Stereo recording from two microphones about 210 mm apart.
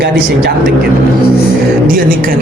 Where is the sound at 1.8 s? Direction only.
40° right (ahead or behind).